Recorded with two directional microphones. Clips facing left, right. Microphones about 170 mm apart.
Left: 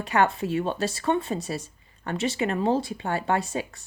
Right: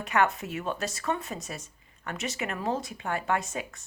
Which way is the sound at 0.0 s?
30° left (ahead or behind).